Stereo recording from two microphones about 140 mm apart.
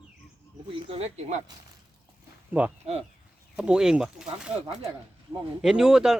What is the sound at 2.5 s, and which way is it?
Speech, 10° right (ahead or behind).